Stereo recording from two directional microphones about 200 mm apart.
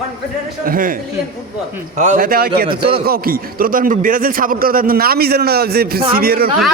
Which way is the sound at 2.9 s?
50° right (ahead or behind).